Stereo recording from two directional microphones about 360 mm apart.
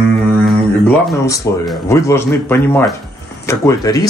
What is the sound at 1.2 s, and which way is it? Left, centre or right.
Speech, centre.